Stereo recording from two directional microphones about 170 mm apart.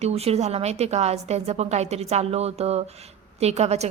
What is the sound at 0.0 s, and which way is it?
Speech, 35° right (ahead or behind).